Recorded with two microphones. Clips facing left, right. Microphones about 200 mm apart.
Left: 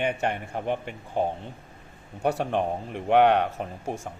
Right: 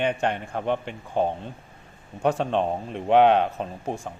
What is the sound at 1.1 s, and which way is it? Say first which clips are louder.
Speech: right 2 dB; 20° right (ahead or behind).